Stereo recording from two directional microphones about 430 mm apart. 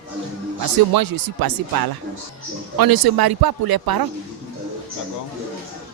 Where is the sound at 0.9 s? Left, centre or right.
Right.